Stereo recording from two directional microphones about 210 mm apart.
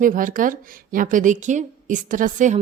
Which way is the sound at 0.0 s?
40° right (ahead or behind).